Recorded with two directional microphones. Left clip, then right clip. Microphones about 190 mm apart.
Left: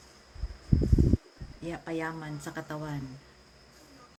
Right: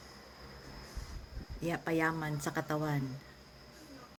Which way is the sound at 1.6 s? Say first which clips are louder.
Right 2 dB; 50° right (ahead or behind).